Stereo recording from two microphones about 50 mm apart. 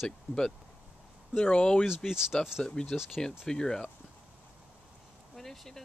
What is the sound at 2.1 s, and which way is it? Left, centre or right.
Speech, centre.